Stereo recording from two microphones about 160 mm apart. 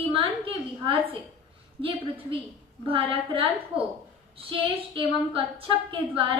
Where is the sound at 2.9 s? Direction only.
35° right (ahead or behind).